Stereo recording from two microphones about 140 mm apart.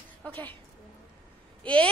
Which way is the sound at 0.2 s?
10° left (ahead or behind).